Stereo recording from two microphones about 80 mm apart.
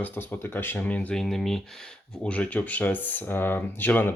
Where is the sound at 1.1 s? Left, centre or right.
Centre.